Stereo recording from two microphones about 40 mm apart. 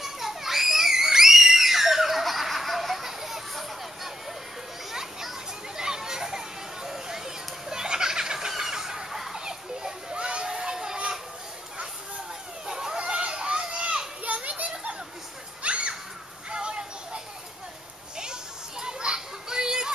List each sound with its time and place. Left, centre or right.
0.0 s screaming: centre
5.8 s children playing: centre
12.6 s children playing: centre; by 15.0 s right
15.6 s a sound: right
18.1 s children playing: centre